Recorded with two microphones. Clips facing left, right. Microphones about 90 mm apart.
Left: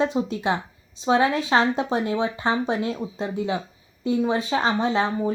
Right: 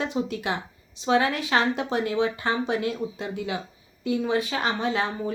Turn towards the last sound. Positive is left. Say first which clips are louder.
# left 4 dB
turn(degrees=25)  # may be behind; listen again after turning